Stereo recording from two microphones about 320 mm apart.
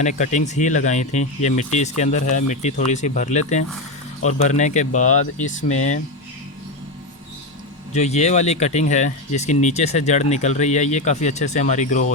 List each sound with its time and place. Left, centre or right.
0.0 s speech: left
7.9 s speech: left